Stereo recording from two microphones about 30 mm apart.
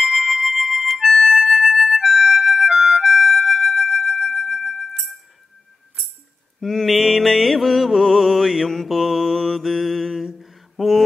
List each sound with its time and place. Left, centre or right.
0.2 s music: centre
1.0 s music: centre
3.9 s music: centre
6.6 s music: centre